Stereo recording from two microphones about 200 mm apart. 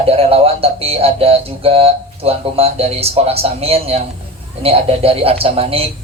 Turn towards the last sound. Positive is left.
turn(degrees=-30)  # may be behind; listen again after turning